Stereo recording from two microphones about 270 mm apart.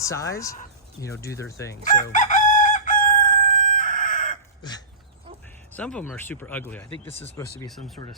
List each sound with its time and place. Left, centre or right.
0.0 s speech: centre
1.7 s speech: left
2.1 s crowing: left
5.7 s speech: centre
7.1 s speech: left